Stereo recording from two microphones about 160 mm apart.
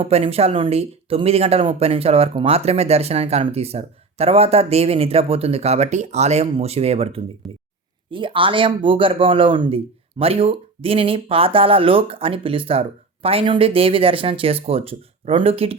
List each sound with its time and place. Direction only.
0.0 s speech: 40° right (ahead or behind)